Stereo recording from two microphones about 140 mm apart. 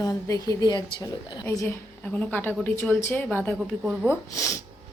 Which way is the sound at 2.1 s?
15° left (ahead or behind).